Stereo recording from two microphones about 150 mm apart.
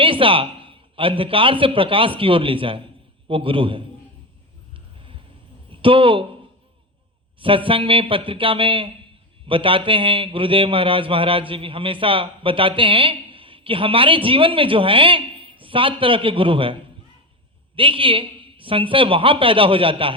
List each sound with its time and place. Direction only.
0.0 s a man's voice: 35° right (ahead or behind)
5.7 s speech: 35° right (ahead or behind)
7.3 s a man's voice: 35° right (ahead or behind)
17.7 s a man's voice: 35° right (ahead or behind)